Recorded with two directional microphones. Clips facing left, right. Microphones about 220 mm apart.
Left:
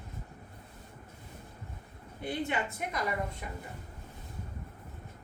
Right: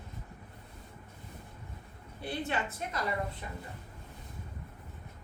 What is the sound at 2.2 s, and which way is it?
Speech, 15° left (ahead or behind).